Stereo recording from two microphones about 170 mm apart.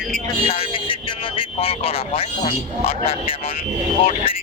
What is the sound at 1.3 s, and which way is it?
Speech, 35° left (ahead or behind).